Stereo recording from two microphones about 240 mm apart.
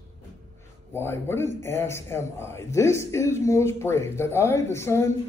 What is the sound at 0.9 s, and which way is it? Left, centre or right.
A man's voice, centre.